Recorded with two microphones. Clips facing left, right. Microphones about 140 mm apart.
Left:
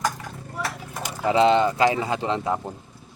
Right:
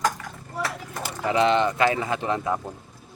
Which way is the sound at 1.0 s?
25° left (ahead or behind).